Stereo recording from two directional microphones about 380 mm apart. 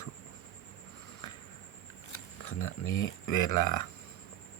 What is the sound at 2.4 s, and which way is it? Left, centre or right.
Speech, left.